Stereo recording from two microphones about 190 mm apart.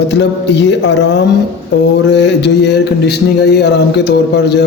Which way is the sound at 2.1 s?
65° left (ahead or behind).